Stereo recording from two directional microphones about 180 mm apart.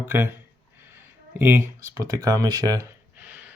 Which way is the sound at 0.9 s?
10° right (ahead or behind).